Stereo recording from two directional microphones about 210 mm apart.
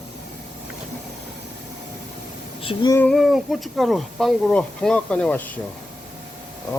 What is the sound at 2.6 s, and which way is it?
Female singing, 25° left (ahead or behind).